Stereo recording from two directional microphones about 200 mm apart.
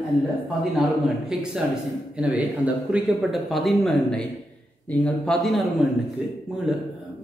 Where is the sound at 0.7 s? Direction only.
Centre (ahead or behind).